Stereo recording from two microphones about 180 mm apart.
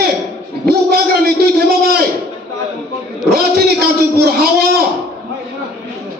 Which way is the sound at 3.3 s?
60° right (ahead or behind).